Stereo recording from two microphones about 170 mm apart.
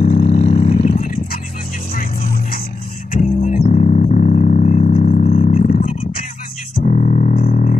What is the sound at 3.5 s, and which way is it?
Music, 50° left (ahead or behind).